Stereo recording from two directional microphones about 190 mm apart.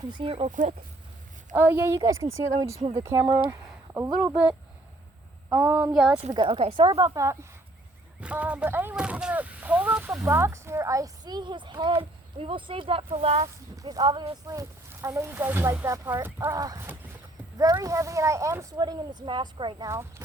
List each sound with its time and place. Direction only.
0.1 s speech: 25° right (ahead or behind); by 0.9 s 45° right (ahead or behind)
1.5 s speech: 10° right (ahead or behind)
5.5 s speech: 15° right (ahead or behind)
6.3 s speech: 30° right (ahead or behind)
8.2 s speech: 5° right (ahead or behind)